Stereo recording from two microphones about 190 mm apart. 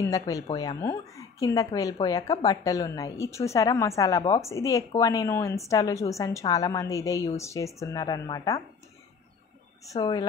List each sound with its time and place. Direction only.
0.0 s a woman's voice: 20° left (ahead or behind)
9.9 s a woman's voice: 20° left (ahead or behind)